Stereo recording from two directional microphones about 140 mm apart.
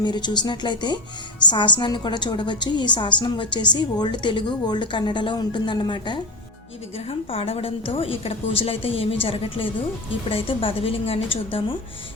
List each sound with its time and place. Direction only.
0.0 s a woman's voice: 30° left (ahead or behind)
10.2 s a woman's voice: 40° left (ahead or behind)